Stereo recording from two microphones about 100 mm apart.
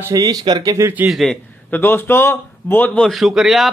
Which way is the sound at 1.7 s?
20° left (ahead or behind).